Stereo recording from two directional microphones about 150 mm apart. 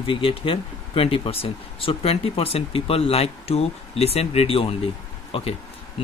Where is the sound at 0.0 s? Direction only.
35° left (ahead or behind).